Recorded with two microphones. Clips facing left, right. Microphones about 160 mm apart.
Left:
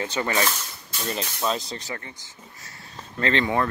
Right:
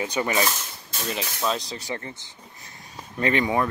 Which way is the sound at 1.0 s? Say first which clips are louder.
Even; centre (ahead or behind).